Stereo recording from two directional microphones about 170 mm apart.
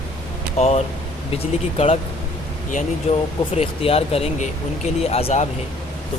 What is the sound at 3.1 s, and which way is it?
Speech, 35° left (ahead or behind).